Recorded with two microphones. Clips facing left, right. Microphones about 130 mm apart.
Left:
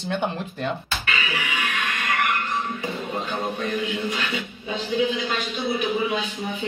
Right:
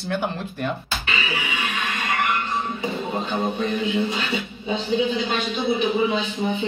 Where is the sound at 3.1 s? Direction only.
25° right (ahead or behind).